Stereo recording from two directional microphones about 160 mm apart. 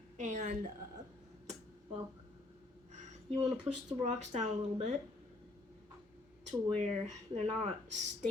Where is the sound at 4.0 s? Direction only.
45° right (ahead or behind).